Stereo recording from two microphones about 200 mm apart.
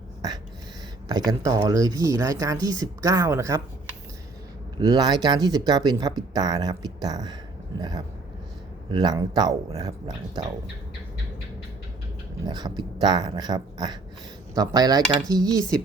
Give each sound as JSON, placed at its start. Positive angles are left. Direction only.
{"t": 1.0, "sound": "speech", "side_deg": -20}
{"t": 4.8, "sound": "speech", "side_deg": -20}
{"t": 12.5, "sound": "speech", "side_deg": -20}